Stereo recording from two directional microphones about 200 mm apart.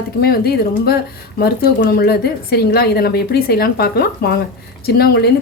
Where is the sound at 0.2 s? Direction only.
50° left (ahead or behind).